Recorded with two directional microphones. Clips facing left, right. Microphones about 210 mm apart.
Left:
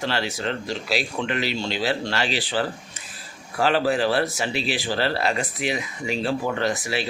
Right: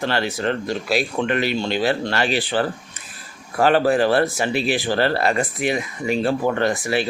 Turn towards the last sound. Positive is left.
turn(degrees=-55)  # may be behind; listen again after turning